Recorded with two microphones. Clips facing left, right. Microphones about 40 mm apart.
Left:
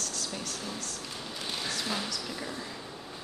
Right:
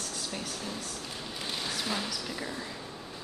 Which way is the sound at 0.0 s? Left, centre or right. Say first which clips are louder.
Even; centre.